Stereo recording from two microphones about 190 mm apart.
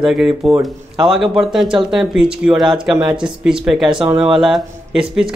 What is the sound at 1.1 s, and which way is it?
Speech, centre (ahead or behind).